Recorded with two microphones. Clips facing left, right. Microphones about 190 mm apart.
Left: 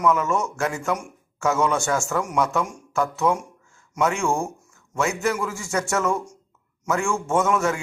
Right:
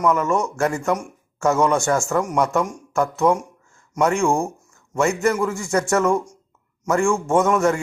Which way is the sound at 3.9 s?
5° left (ahead or behind).